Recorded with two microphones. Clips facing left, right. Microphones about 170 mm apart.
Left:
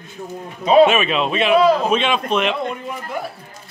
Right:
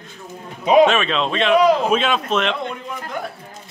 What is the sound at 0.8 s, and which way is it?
Speech, 15° left (ahead or behind).